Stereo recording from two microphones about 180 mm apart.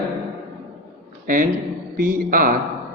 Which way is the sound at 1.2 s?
50° right (ahead or behind).